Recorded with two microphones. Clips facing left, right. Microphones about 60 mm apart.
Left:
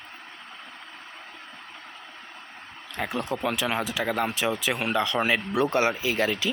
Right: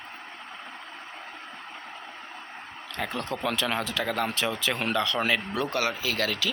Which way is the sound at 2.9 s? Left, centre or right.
Centre.